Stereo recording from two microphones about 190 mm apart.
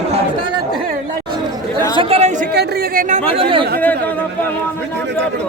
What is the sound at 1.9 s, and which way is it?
Speech, 30° right (ahead or behind).